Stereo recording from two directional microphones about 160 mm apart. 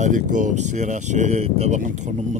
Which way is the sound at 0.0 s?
55° right (ahead or behind).